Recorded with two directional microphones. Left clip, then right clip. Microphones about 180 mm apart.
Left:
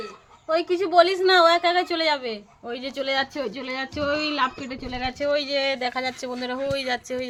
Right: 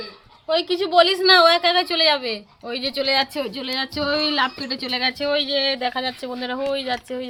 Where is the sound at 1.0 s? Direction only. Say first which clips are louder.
Right 3 dB; 20° right (ahead or behind).